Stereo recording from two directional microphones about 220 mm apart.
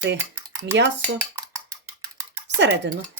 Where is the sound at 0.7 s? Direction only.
10° right (ahead or behind).